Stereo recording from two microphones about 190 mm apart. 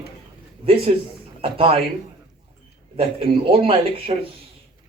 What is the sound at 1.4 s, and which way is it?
Speech, 30° right (ahead or behind).